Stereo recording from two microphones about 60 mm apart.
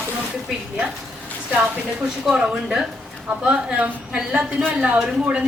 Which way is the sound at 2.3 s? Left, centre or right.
Centre.